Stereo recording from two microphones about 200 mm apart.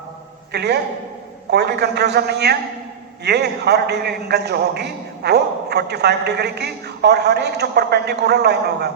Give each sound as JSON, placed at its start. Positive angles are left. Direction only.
{"t": 0.5, "sound": "a man's voice", "side_deg": -55}